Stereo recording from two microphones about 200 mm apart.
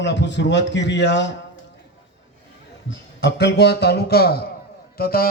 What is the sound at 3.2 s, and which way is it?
A man's voice, 60° left (ahead or behind).